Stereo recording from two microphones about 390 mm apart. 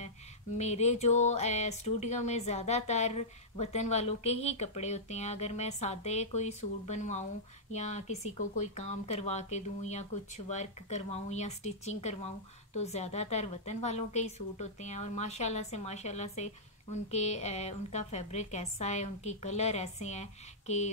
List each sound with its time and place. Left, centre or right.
0.6 s speech: centre